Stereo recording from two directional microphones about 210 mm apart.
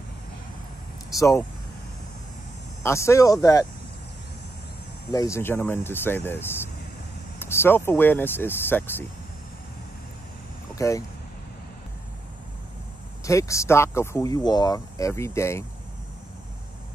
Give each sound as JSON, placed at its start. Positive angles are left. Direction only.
{"t": 1.1, "sound": "speech", "side_deg": 15}
{"t": 2.8, "sound": "speech", "side_deg": 15}
{"t": 5.1, "sound": "speech", "side_deg": 15}
{"t": 10.8, "sound": "speech", "side_deg": 15}
{"t": 13.2, "sound": "speech", "side_deg": 15}